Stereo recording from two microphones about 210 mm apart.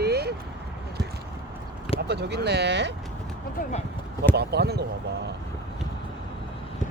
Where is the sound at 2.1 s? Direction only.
50° right (ahead or behind).